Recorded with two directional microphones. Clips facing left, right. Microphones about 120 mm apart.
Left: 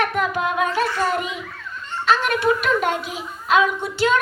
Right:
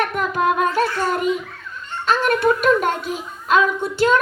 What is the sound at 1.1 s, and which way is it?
Speech, 45° right (ahead or behind).